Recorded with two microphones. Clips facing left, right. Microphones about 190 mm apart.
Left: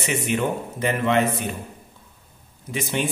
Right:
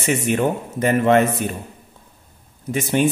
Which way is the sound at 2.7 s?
45° right (ahead or behind).